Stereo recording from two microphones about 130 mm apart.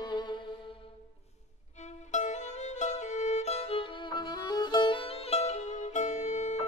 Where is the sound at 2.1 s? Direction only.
65° left (ahead or behind).